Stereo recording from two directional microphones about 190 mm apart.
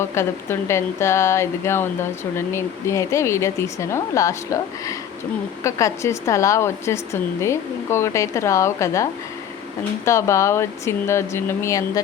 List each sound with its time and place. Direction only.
0.0 s speech: 15° left (ahead or behind)
10.1 s speech: 15° left (ahead or behind)